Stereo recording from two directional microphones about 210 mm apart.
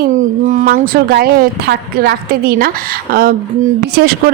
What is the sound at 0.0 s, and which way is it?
Speech, 40° right (ahead or behind).